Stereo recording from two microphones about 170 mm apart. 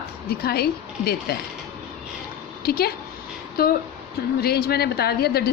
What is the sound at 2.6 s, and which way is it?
A woman's voice, 65° left (ahead or behind).